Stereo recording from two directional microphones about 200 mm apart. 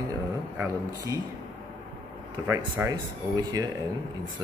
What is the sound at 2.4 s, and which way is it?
A man's voice, 15° right (ahead or behind).